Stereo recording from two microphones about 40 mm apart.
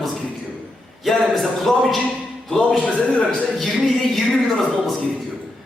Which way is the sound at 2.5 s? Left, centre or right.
Centre.